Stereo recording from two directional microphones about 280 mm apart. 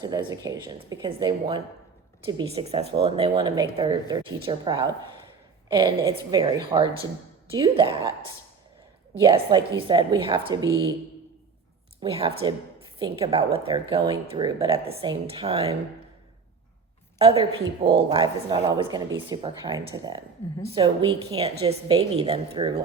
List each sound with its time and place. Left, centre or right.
0.0 s speech: centre
9.2 s speech: centre
12.0 s speech: centre
17.2 s a woman's voice: right